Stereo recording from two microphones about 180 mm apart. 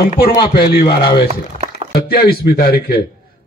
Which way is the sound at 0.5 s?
55° left (ahead or behind).